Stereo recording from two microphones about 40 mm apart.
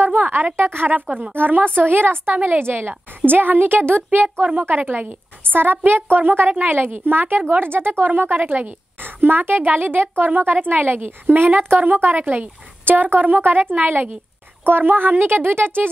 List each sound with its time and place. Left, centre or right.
0.0 s a woman's voice: right
0.6 s a woman's voice: right
1.3 s a woman's voice: right
2.3 s a woman's voice: right
2.6 s a woman's voice: right
5.4 s a sound: right
5.9 s a woman's voice: right